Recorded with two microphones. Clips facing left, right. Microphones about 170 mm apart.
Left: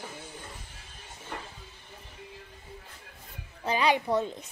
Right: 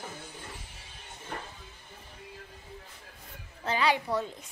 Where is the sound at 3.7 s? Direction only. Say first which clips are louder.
Left 2 dB; 20° left (ahead or behind).